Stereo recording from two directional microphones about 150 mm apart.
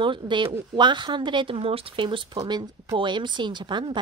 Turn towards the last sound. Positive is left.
turn(degrees=-30)  # may be behind; listen again after turning